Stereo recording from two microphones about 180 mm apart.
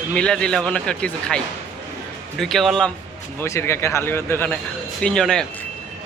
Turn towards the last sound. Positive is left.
turn(degrees=5)  # may be behind; listen again after turning